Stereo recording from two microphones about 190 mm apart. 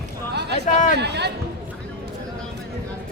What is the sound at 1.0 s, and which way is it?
Speech, 60° right (ahead or behind).